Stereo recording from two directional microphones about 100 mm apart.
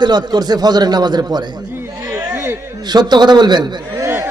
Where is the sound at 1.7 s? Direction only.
20° right (ahead or behind).